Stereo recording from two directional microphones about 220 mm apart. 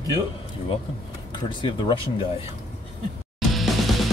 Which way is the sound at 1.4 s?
20° left (ahead or behind).